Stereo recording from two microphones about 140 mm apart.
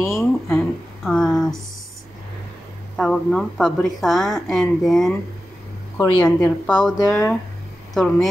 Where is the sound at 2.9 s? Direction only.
5° left (ahead or behind).